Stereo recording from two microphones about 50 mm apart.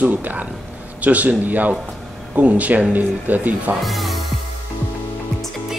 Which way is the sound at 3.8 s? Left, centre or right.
Centre.